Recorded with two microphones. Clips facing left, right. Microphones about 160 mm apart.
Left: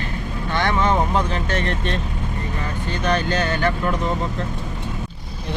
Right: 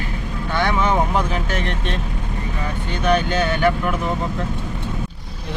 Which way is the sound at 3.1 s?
10° right (ahead or behind).